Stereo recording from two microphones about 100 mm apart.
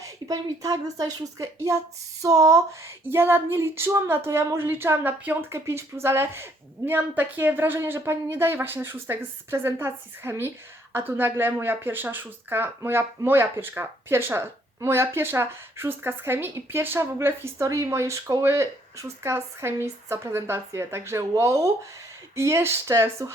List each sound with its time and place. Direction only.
0.0 s a woman's voice: 35° right (ahead or behind)